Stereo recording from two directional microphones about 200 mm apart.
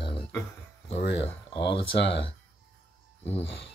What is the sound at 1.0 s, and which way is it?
Speech, 60° left (ahead or behind).